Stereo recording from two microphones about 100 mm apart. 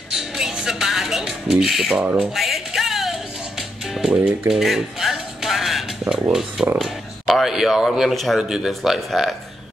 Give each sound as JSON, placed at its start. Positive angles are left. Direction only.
{"t": 0.1, "sound": "music", "side_deg": -5}
{"t": 2.0, "sound": "speech", "side_deg": -15}
{"t": 2.3, "sound": "music", "side_deg": 0}
{"t": 6.8, "sound": "a man's voice", "side_deg": 0}